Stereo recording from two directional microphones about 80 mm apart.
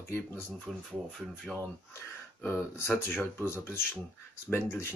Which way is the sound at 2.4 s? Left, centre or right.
Left.